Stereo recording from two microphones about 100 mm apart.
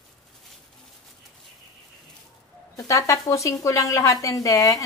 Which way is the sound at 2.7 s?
30° left (ahead or behind).